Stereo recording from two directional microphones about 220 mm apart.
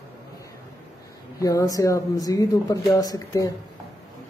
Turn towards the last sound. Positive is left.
turn(degrees=15)  # may be behind; listen again after turning